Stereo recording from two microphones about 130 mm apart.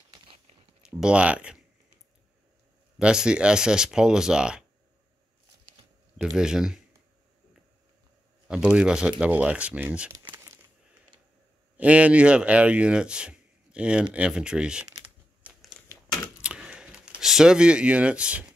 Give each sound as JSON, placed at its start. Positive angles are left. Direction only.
{"t": 0.8, "sound": "speech", "side_deg": -5}
{"t": 3.0, "sound": "speech", "side_deg": -5}
{"t": 6.2, "sound": "speech", "side_deg": -5}
{"t": 8.5, "sound": "speech", "side_deg": -5}
{"t": 10.2, "sound": "a sound", "side_deg": -20}
{"t": 11.7, "sound": "speech", "side_deg": -10}
{"t": 15.4, "sound": "crumpling", "side_deg": 0}
{"t": 16.4, "sound": "a sound", "side_deg": -10}